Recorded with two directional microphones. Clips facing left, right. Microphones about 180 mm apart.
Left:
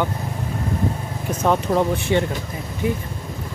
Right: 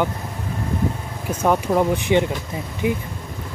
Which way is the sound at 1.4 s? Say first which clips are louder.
Right 1 dB; 10° right (ahead or behind).